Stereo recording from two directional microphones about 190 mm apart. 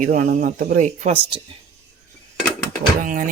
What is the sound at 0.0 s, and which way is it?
Speech, 45° right (ahead or behind).